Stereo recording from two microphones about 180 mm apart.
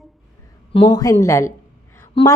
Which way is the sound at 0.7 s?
25° left (ahead or behind).